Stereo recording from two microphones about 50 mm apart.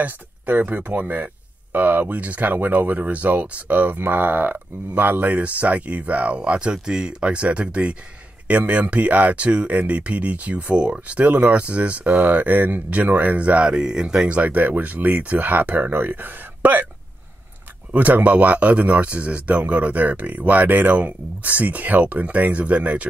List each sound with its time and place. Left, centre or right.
0.0 s speech: right
17.9 s speech: right